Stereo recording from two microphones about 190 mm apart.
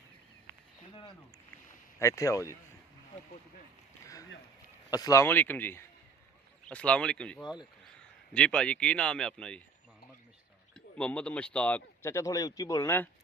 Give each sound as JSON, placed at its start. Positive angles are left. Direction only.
{"t": 2.0, "sound": "speech", "side_deg": 15}
{"t": 4.0, "sound": "rowboat", "side_deg": 15}
{"t": 4.9, "sound": "a man's voice", "side_deg": 20}
{"t": 10.8, "sound": "speech", "side_deg": 5}